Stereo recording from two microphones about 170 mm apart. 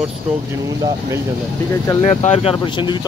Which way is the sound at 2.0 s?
40° left (ahead or behind).